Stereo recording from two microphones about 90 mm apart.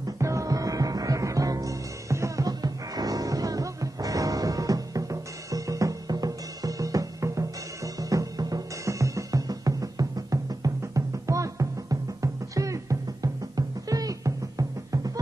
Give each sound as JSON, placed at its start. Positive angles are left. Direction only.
{"t": 0.2, "sound": "music", "side_deg": -35}